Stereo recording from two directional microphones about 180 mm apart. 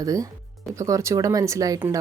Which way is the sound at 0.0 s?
20° right (ahead or behind).